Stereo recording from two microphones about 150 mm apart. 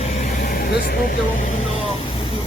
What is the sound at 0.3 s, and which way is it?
Speech, 85° left.